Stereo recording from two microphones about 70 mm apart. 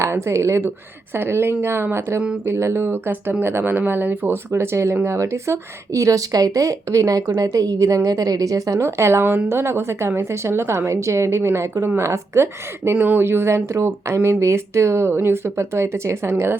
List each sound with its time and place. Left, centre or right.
0.0 s a woman's voice: right
4.5 s a woman's voice: right